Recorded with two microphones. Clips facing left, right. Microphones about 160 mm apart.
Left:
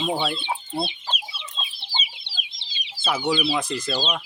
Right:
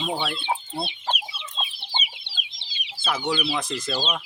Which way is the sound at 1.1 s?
55° right (ahead or behind).